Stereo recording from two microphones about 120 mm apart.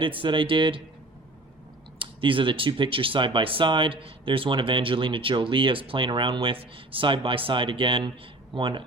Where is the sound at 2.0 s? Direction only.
45° right (ahead or behind).